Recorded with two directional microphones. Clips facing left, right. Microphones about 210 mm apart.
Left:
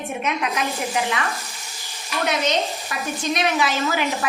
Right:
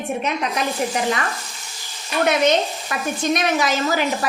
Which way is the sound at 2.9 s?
50° right (ahead or behind).